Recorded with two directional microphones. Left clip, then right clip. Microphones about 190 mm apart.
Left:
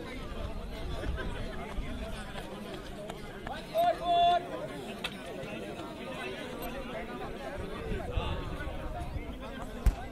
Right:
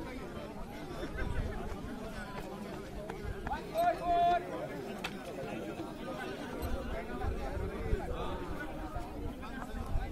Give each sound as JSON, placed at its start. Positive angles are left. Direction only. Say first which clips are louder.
{"t": 3.4, "sound": "run", "louder": "left 3 dB", "side_deg": 20}